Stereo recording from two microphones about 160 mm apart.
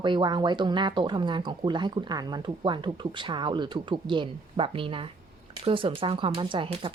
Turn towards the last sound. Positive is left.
turn(degrees=-30)  # may be behind; listen again after turning